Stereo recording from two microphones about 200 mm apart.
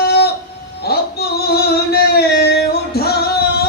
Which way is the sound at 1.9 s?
50° left (ahead or behind).